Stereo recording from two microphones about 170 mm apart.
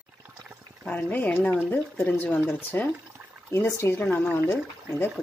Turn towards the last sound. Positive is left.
turn(degrees=10)  # may be behind; listen again after turning